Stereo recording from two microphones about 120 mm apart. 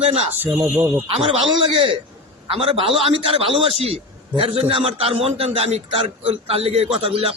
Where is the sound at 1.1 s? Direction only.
55° right (ahead or behind).